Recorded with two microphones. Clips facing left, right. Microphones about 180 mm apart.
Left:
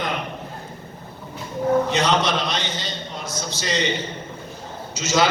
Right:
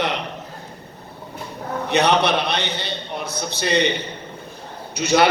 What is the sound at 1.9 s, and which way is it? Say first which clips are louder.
A man's voice: right 3 dB; 65° right (ahead or behind).